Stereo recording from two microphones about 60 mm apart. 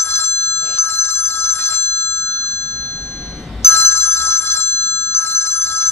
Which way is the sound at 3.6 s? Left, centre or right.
Left.